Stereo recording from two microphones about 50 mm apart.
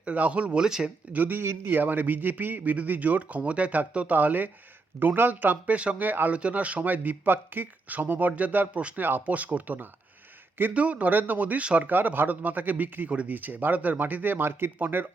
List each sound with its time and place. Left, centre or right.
0.0 s speech: right
0.6 s speech: centre
1.1 s a man's voice: right
1.4 s a man's voice: right
6.1 s a man's voice: right
6.3 s a man's voice: right
9.0 s speech: right
9.2 s a man's voice: right
11.9 s a man's voice: right